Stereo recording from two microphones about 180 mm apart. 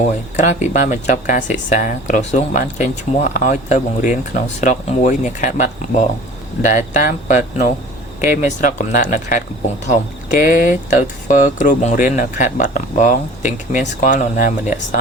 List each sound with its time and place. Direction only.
0.3 s speech: 40° left (ahead or behind)